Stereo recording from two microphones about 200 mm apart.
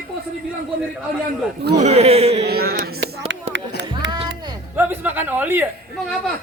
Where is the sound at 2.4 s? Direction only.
50° right (ahead or behind).